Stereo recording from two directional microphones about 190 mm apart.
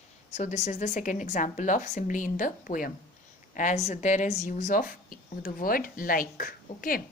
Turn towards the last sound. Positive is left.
turn(degrees=50)  # may be behind; listen again after turning